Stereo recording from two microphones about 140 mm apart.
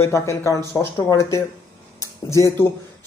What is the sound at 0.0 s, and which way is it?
Speech, 20° left (ahead or behind).